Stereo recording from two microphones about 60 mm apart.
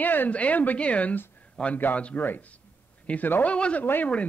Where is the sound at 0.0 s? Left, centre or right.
Left.